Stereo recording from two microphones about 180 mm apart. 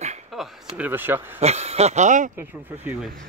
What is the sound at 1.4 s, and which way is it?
Speech, 35° right (ahead or behind).